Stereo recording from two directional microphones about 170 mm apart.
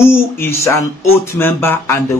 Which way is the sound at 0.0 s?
15° left (ahead or behind).